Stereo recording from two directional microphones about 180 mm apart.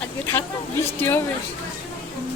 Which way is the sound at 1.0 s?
10° left (ahead or behind).